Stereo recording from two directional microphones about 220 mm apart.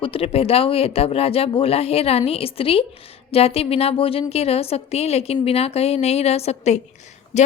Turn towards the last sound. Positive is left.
turn(degrees=30)  # may be behind; listen again after turning